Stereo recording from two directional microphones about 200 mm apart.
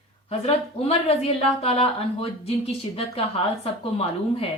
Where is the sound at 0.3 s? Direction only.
30° left (ahead or behind).